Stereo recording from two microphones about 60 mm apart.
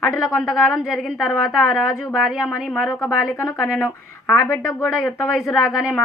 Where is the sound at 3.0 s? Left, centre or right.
Left.